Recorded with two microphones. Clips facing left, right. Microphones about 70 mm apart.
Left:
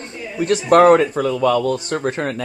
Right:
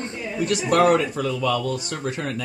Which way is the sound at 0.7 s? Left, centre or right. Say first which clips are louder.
Left 7 dB; left.